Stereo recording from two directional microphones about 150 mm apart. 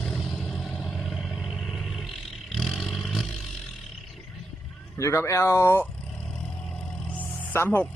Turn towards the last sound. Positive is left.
turn(degrees=15)  # may be behind; listen again after turning